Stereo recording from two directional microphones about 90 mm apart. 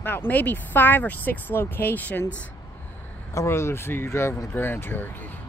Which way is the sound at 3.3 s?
35° left (ahead or behind).